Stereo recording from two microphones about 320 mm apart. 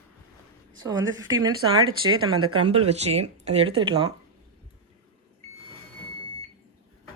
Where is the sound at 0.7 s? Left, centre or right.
Centre.